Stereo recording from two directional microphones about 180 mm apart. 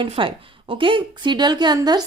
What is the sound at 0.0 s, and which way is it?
A woman's voice, 30° right (ahead or behind).